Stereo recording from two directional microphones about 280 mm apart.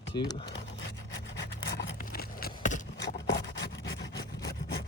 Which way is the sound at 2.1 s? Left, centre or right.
Left.